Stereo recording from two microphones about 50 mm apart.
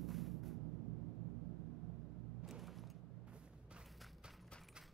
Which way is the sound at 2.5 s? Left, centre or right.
Centre.